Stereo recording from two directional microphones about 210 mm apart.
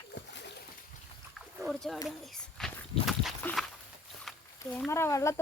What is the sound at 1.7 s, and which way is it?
Speech, centre (ahead or behind).